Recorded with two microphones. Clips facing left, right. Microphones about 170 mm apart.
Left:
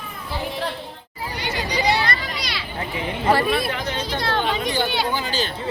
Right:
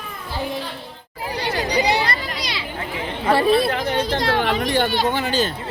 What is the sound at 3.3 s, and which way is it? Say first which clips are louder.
Chatter: right 4 dB; 30° right (ahead or behind).